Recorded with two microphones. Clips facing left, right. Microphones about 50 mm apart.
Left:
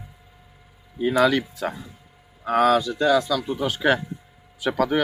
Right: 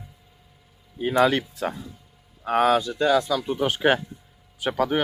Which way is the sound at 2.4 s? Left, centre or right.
Centre.